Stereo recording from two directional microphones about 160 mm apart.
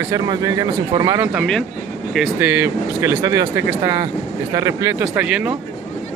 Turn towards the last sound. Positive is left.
turn(degrees=-20)  # may be behind; listen again after turning